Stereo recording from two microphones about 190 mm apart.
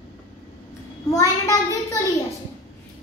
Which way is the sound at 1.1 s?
15° left (ahead or behind).